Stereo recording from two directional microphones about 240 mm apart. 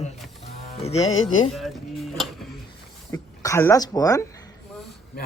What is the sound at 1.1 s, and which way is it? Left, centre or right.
Speech, left.